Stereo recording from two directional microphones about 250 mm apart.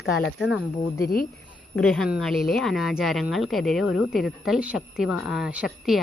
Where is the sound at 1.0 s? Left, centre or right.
Left.